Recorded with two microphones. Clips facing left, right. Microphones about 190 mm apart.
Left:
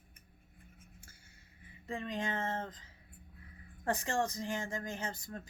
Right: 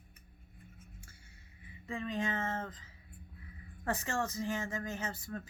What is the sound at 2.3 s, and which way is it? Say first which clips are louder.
Speech: even; 35° left (ahead or behind).